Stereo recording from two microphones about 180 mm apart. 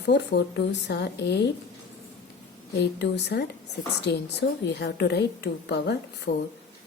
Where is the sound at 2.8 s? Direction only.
70° left (ahead or behind).